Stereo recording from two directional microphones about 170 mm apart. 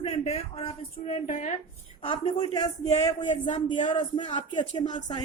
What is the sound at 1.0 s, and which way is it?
Speech, 50° left (ahead or behind).